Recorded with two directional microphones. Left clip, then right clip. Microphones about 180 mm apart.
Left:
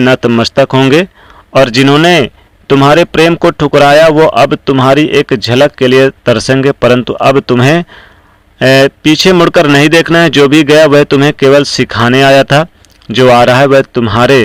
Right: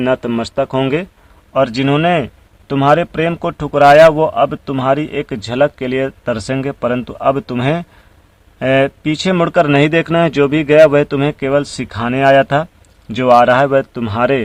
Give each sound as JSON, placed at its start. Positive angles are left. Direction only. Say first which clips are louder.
{"t": 0.2, "sound": "a man's voice", "louder": "left 10 dB", "side_deg": 30}
{"t": 9.1, "sound": "a man's voice", "louder": "left 6 dB", "side_deg": 25}